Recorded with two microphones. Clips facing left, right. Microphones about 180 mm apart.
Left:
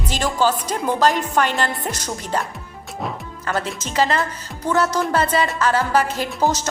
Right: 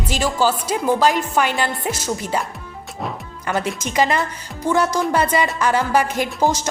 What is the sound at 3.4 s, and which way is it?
A woman's voice, 15° right (ahead or behind).